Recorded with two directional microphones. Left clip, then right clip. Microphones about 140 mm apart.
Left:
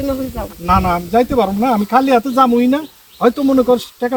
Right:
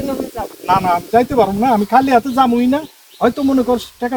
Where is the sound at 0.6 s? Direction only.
15° right (ahead or behind).